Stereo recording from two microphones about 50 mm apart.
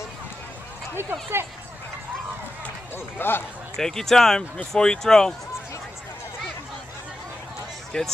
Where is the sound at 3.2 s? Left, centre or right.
Left.